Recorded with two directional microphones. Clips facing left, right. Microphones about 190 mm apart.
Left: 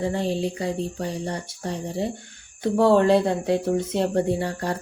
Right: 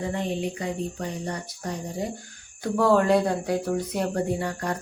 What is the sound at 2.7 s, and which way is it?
Speech, 30° left (ahead or behind).